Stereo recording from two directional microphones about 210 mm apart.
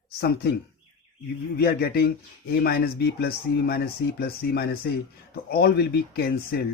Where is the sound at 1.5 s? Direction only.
45° left (ahead or behind).